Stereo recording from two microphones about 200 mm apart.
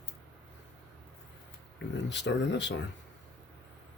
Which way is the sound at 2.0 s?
60° left (ahead or behind).